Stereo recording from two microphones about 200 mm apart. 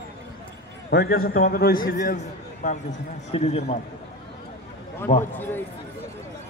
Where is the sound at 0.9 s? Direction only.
55° left (ahead or behind); by 3.7 s 30° left (ahead or behind).